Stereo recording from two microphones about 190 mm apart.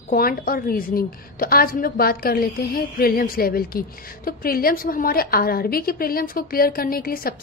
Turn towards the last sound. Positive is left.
turn(degrees=50)  # may be behind; listen again after turning